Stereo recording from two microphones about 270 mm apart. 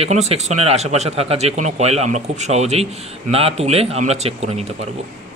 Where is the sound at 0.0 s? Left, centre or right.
Right.